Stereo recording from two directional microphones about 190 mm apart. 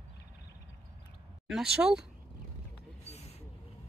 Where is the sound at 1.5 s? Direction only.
5° right (ahead or behind).